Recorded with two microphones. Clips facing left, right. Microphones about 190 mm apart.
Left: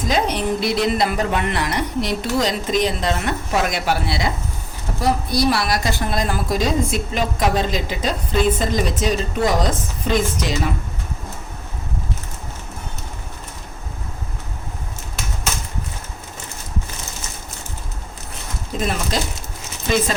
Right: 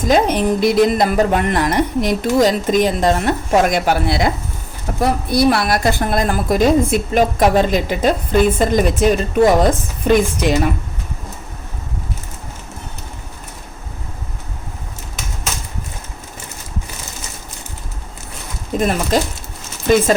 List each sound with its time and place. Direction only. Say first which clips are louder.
0.1 s a woman's voice: right 6 dB; 50° right (ahead or behind)
18.7 s a sound: right 6 dB; 50° right (ahead or behind)
19.1 s speech: right 7 dB; 50° right (ahead or behind)